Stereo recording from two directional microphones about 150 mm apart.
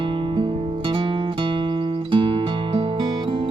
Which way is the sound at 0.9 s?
35° right (ahead or behind).